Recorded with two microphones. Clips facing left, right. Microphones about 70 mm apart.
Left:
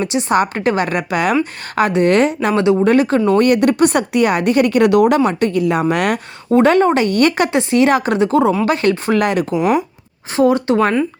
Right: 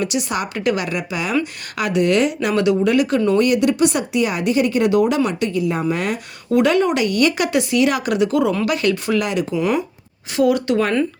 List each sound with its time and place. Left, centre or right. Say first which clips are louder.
0.0 s speech: left 6 dB; left
1.7 s speech: left 4 dB; left
6.5 s speech: left 4 dB; left
10.3 s speech: left 3 dB; left